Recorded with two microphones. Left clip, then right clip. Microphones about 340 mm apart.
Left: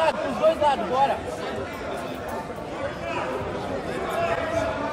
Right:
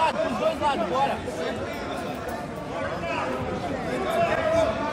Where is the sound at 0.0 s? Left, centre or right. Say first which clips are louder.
Left 2 dB; left.